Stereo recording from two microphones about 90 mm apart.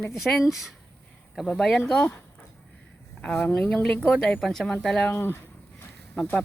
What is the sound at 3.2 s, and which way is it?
Speech, 10° left (ahead or behind).